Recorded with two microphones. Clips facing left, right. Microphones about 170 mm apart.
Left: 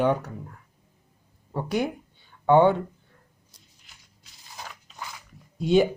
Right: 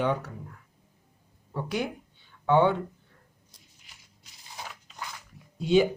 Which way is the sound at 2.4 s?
45° left (ahead or behind).